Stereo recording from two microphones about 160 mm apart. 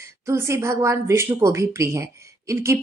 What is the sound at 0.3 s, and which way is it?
A woman's voice, 15° right (ahead or behind).